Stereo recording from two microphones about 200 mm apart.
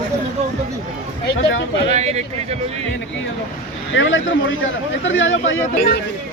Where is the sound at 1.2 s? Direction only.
60° left (ahead or behind).